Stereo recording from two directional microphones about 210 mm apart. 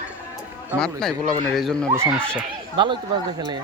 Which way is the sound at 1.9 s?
10° right (ahead or behind).